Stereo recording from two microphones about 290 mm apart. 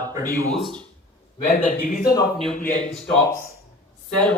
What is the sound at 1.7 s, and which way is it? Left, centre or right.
Speech, left.